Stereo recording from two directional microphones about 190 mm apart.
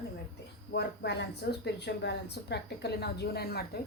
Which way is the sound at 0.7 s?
60° left (ahead or behind).